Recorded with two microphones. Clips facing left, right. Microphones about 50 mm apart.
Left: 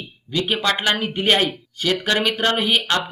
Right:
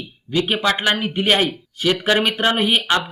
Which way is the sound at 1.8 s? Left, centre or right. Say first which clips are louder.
Right 2 dB; centre.